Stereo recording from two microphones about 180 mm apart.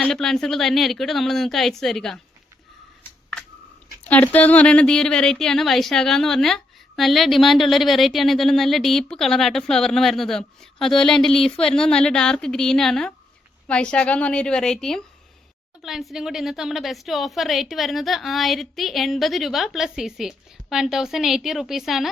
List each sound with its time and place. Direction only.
0.0 s speech: 5° left (ahead or behind)
3.0 s a sound: 5° left (ahead or behind)
4.1 s speech: 10° left (ahead or behind)